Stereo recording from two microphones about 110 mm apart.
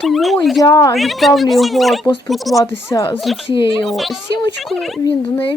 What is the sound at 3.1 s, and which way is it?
Speech, centre (ahead or behind).